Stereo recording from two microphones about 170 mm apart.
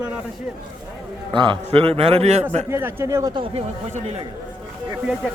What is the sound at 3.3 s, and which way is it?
Speech, 30° right (ahead or behind).